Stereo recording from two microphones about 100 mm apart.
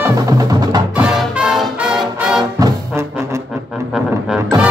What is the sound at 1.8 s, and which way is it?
Brass instrument, 10° right (ahead or behind).